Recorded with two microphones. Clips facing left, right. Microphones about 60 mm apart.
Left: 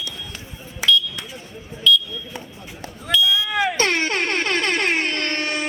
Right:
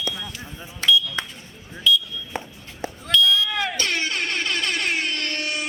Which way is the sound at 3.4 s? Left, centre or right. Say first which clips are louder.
Left 4 dB; centre.